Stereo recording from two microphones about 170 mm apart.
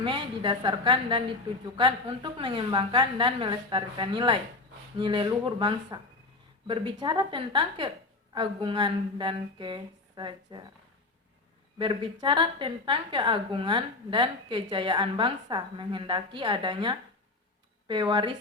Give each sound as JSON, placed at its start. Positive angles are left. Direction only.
{"t": 0.0, "sound": "a woman's voice", "side_deg": -30}
{"t": 11.8, "sound": "a woman's voice", "side_deg": -30}